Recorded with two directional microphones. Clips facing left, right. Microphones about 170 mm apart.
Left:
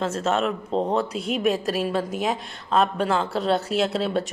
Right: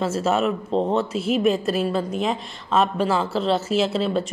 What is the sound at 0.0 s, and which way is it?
A woman's voice, 5° right (ahead or behind).